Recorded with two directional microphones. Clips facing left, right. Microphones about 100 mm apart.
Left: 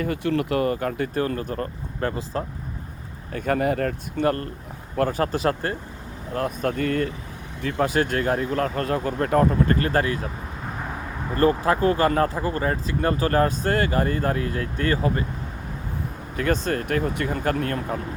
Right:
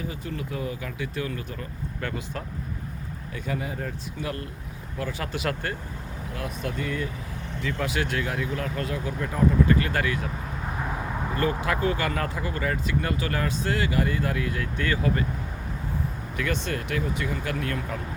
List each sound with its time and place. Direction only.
0.0 s speech: 70° left (ahead or behind); by 2.0 s 45° left (ahead or behind)
2.0 s speech: 35° left (ahead or behind)
3.3 s speech: 55° left (ahead or behind); by 5.7 s 35° left (ahead or behind)
6.3 s speech: 45° left (ahead or behind)
7.6 s speech: 45° left (ahead or behind)
9.7 s speech: 40° left (ahead or behind)
11.3 s speech: 40° left (ahead or behind)
16.4 s speech: 40° left (ahead or behind)